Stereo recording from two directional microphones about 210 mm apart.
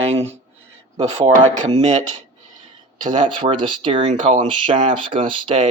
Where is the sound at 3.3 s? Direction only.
25° right (ahead or behind).